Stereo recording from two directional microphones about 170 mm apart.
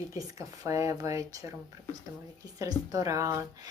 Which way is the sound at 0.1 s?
20° right (ahead or behind).